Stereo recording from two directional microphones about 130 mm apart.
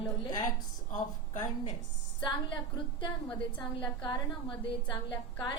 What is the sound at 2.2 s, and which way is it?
A woman's voice, 35° left (ahead or behind).